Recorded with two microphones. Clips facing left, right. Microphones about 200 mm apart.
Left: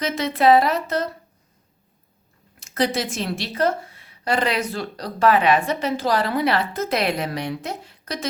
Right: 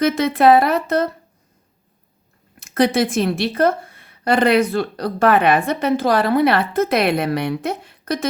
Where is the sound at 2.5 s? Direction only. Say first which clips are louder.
Right 6 dB; 55° right (ahead or behind).